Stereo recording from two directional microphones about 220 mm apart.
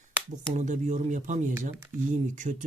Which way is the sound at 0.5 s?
35° right (ahead or behind).